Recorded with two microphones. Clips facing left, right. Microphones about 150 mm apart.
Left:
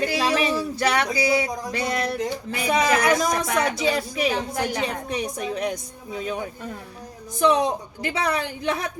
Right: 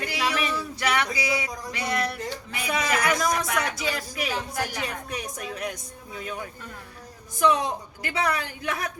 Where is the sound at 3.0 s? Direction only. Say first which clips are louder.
Left 4 dB; 30° left (ahead or behind).